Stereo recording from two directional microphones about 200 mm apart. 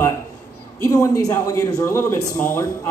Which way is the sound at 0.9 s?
15° left (ahead or behind).